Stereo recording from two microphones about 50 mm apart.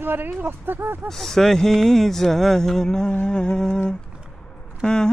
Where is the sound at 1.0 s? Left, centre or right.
Centre.